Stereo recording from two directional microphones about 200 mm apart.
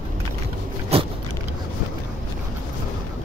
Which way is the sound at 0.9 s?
30° right (ahead or behind).